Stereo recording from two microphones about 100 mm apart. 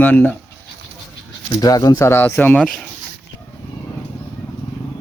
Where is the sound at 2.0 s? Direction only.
25° left (ahead or behind).